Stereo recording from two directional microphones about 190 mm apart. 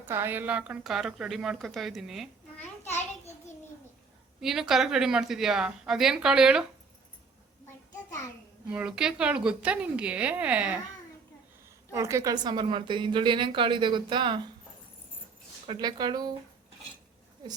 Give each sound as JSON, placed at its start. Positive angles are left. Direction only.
{"t": 0.0, "sound": "a woman's voice", "side_deg": -10}
{"t": 4.4, "sound": "a woman's voice", "side_deg": 0}
{"t": 8.7, "sound": "a woman's voice", "side_deg": -5}
{"t": 11.9, "sound": "a woman's voice", "side_deg": -15}
{"t": 15.6, "sound": "a woman's voice", "side_deg": -25}